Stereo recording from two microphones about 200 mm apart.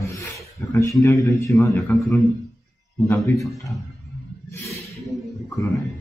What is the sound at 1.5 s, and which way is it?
Speech, centre (ahead or behind).